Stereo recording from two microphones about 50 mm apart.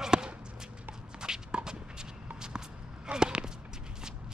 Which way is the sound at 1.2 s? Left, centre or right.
Centre.